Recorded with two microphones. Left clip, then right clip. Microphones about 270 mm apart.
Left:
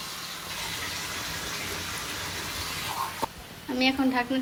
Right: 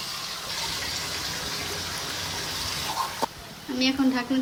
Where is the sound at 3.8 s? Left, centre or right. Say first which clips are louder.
Even; centre.